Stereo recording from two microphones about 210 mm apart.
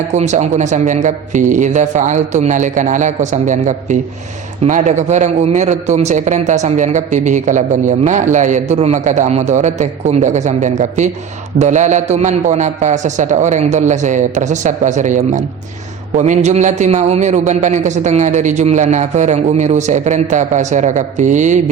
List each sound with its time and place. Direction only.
0.1 s a man's voice: 35° right (ahead or behind)